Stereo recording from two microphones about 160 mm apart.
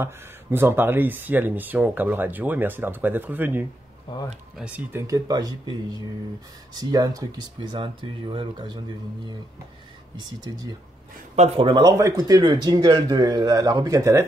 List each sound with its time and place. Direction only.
0.0 s speech: 15° right (ahead or behind)
6.8 s speech: 25° right (ahead or behind)
10.1 s speech: 25° right (ahead or behind)
11.3 s speech: 45° right (ahead or behind)
11.6 s speech: 25° right (ahead or behind)